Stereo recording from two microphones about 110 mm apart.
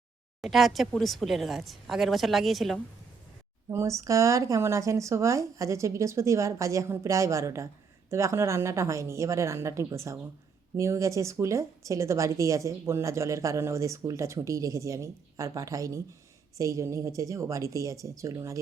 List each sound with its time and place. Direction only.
0.4 s speech: centre (ahead or behind)
3.7 s a woman's voice: 25° right (ahead or behind)